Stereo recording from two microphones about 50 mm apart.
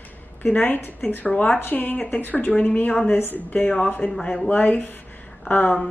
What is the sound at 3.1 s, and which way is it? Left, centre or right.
Speech, left.